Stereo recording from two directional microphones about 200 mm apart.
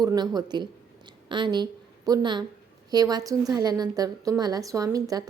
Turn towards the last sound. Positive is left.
turn(degrees=-15)  # may be behind; listen again after turning